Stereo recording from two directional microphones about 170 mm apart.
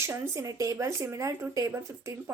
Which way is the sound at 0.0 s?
15° right (ahead or behind).